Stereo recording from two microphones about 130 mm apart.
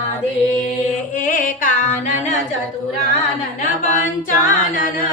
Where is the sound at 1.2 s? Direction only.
90° left.